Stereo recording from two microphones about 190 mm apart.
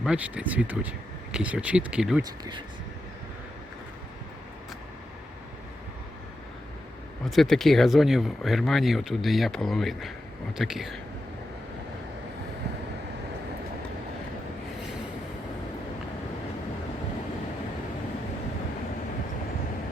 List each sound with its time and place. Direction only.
0.0 s speech: 5° right (ahead or behind)
2.2 s speech: 20° right (ahead or behind)
7.3 s speech: centre (ahead or behind)